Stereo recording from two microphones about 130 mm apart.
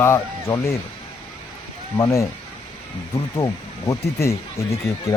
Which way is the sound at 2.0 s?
25° left (ahead or behind).